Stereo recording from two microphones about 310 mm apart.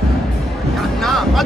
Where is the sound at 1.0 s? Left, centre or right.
Centre.